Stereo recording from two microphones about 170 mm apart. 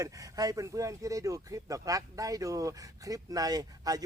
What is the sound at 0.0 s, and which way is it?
Speech, 20° right (ahead or behind).